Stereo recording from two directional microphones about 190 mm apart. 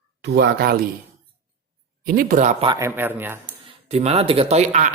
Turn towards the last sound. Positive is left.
turn(degrees=-35)  # may be behind; listen again after turning